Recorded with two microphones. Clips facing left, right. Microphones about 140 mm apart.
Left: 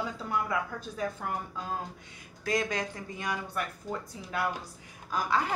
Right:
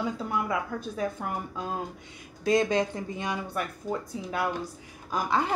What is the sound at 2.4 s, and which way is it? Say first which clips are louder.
Speech: right 7 dB; 25° right (ahead or behind).